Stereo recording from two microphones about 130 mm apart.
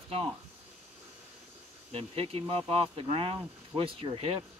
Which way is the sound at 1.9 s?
50° right (ahead or behind).